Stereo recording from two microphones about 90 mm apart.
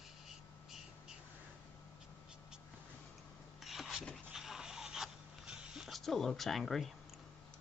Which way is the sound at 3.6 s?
Centre (ahead or behind).